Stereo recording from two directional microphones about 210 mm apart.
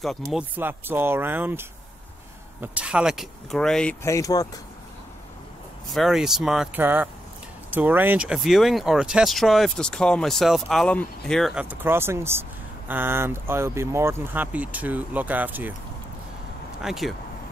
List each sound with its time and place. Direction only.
0.3 s speech: 10° right (ahead or behind); by 4.5 s 15° left (ahead or behind)
5.9 s speech: centre (ahead or behind)
16.8 s speech: centre (ahead or behind)